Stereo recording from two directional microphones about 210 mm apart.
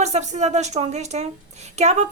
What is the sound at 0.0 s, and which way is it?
A woman's voice, 35° right (ahead or behind).